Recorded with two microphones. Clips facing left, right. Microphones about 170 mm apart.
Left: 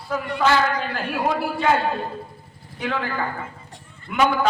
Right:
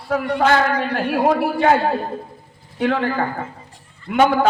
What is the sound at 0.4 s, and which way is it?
Speech, 60° right (ahead or behind).